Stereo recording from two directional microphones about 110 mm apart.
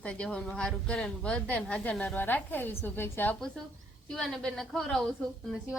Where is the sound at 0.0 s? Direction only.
10° left (ahead or behind).